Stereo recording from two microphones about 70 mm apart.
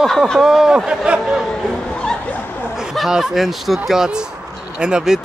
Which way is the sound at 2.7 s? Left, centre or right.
Centre.